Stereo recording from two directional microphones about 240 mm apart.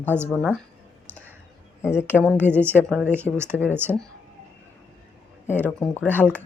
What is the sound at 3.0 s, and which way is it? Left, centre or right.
Speech, centre.